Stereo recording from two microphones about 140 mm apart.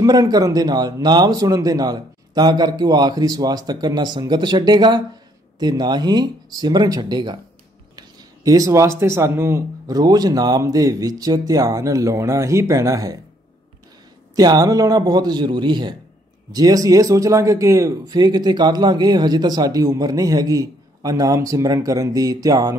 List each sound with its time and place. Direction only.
0.0 s a man's voice: 25° right (ahead or behind)
8.5 s a man's voice: 25° right (ahead or behind)
14.3 s a man's voice: 25° right (ahead or behind)